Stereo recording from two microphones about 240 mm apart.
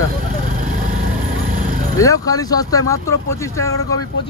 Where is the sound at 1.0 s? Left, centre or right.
Right.